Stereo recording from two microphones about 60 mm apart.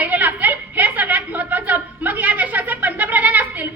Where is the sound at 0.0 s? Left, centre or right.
Right.